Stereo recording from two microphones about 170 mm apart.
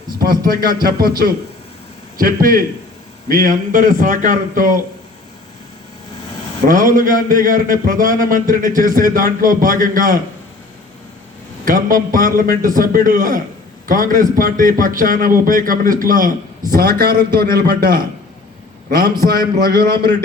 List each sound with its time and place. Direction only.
0.2 s a man's voice: 60° right (ahead or behind)
2.1 s a man's voice: 55° right (ahead or behind)
6.7 s a man's voice: 50° right (ahead or behind)
11.6 s a man's voice: 55° right (ahead or behind)
16.7 s a man's voice: 65° right (ahead or behind)
19.2 s a man's voice: 60° right (ahead or behind)